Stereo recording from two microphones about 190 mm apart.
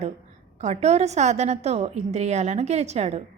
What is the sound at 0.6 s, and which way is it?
A woman's voice, 35° right (ahead or behind).